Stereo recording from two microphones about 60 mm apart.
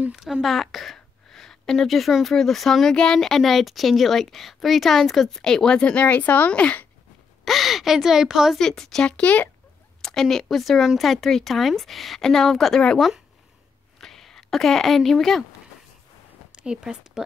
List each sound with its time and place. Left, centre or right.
0.1 s a sound: centre
2.2 s speech: centre; by 6.9 s left
7.4 s speech: centre
8.5 s speech: centre
9.1 s speech: left
10.0 s speech: centre
13.9 s a sound: centre
16.5 s a woman's voice: centre